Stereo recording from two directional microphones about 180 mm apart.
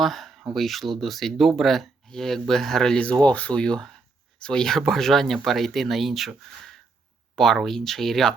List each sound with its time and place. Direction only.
0.0 s speech: centre (ahead or behind)